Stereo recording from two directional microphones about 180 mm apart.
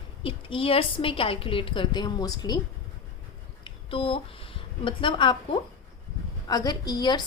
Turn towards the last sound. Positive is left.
turn(degrees=25)  # may be behind; listen again after turning